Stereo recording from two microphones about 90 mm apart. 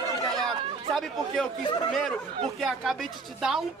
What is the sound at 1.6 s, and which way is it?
Speech, 55° left (ahead or behind).